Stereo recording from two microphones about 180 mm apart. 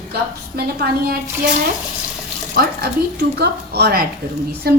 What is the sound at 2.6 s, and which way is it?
A woman's voice, 60° right (ahead or behind).